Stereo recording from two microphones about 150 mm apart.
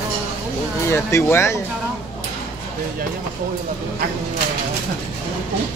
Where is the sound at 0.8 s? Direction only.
20° left (ahead or behind).